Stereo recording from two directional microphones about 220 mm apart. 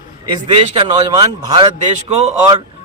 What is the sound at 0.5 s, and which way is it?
A man's voice, 25° right (ahead or behind).